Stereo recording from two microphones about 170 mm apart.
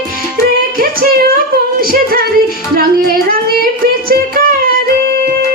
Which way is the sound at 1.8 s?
60° right (ahead or behind).